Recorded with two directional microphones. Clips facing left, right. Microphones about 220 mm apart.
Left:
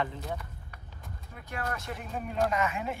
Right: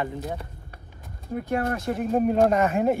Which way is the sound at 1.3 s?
45° right (ahead or behind).